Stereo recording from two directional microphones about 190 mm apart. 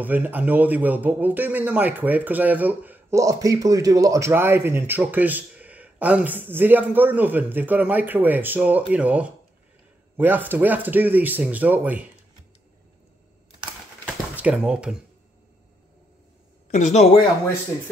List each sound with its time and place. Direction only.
0.0 s a man's voice: 10° right (ahead or behind)
14.0 s a sound: 5° right (ahead or behind)
16.7 s a woman's voice: 40° left (ahead or behind)